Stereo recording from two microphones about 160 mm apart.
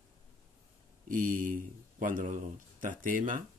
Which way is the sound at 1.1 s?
55° right (ahead or behind).